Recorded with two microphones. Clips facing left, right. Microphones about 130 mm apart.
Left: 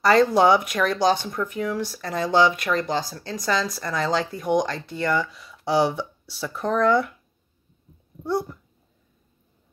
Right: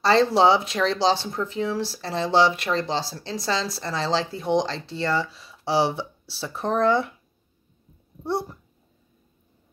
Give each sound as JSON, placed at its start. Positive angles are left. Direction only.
{"t": 0.0, "sound": "speech", "side_deg": -30}
{"t": 8.2, "sound": "speech", "side_deg": -25}